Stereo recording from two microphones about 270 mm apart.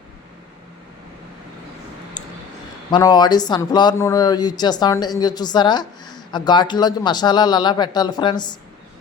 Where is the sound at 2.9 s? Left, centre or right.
Centre.